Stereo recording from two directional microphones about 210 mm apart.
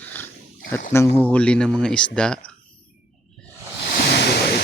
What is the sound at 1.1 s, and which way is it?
Speech, 5° left (ahead or behind).